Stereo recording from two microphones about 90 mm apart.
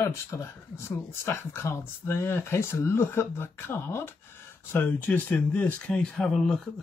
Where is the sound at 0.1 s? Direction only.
30° left (ahead or behind).